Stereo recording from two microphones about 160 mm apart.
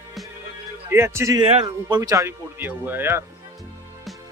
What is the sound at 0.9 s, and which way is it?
Speech, 15° right (ahead or behind).